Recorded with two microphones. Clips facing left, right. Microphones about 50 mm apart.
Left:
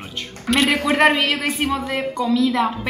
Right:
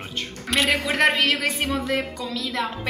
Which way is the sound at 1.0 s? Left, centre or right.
Centre.